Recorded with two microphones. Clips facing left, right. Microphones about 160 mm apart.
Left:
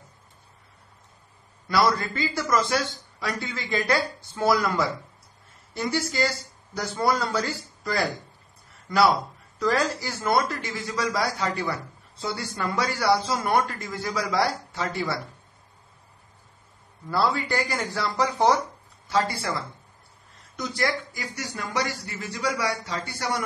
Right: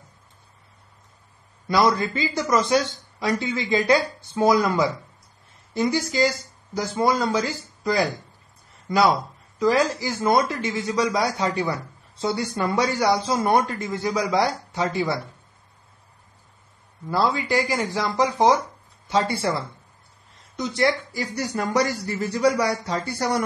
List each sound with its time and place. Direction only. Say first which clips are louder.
1.7 s speech: right 3 dB; 20° right (ahead or behind)
17.1 s speech: right 3 dB; 15° right (ahead or behind)
20.5 s speech: right 5 dB; 25° right (ahead or behind)